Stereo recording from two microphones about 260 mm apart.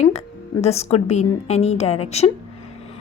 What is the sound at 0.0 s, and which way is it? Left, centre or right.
A woman's voice, left.